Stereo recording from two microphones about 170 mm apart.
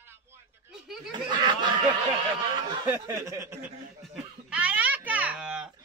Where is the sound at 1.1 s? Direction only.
25° right (ahead or behind).